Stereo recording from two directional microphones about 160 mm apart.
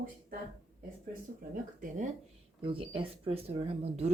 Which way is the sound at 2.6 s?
35° right (ahead or behind).